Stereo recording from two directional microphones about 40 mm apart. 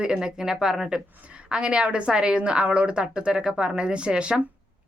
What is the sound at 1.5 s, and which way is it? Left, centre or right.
A woman's voice, right.